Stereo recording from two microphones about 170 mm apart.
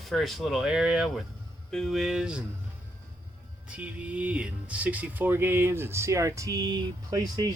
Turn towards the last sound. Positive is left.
turn(degrees=-20)  # may be behind; listen again after turning